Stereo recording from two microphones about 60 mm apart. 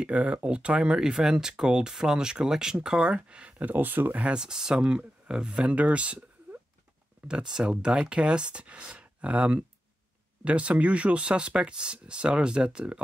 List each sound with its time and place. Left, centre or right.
0.0 s speech: right
4.2 s speech: centre